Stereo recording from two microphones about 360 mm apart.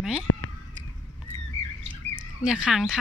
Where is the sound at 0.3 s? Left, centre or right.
Left.